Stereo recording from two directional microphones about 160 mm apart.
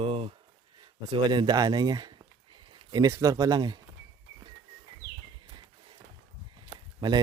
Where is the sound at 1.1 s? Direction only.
30° right (ahead or behind).